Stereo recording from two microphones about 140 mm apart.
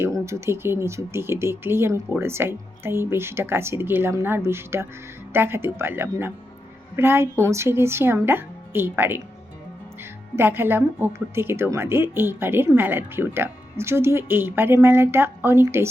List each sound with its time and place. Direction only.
0.0 s a woman's voice: 20° right (ahead or behind)